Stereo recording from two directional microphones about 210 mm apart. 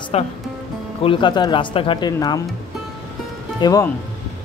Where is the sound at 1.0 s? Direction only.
25° left (ahead or behind).